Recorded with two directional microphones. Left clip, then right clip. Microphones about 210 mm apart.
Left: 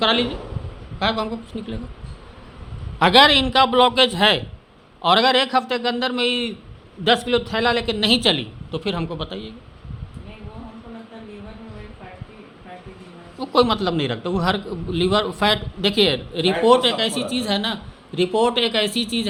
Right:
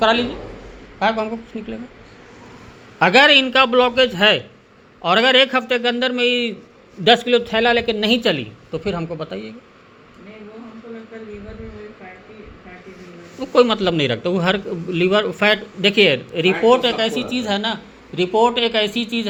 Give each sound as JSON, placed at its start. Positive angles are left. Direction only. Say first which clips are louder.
{"t": 0.0, "sound": "speech", "louder": "right 3 dB", "side_deg": 10}
{"t": 3.0, "sound": "speech", "louder": "right 2 dB", "side_deg": 10}
{"t": 13.4, "sound": "a man's voice", "louder": "right 3 dB", "side_deg": 10}